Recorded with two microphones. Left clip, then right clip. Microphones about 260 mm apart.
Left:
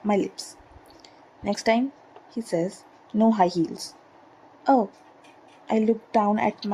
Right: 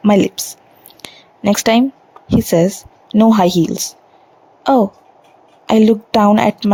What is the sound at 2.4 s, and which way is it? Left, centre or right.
Speech, right.